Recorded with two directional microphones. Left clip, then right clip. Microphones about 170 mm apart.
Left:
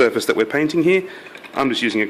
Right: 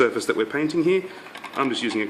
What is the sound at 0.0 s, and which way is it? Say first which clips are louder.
Speech: left 5 dB; 40° left (ahead or behind).